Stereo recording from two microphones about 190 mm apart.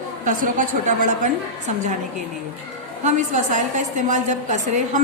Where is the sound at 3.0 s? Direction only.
40° right (ahead or behind).